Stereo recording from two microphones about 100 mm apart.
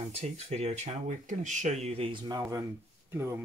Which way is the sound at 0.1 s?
90° right.